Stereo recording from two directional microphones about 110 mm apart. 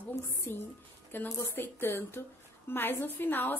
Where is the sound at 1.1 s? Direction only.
20° left (ahead or behind).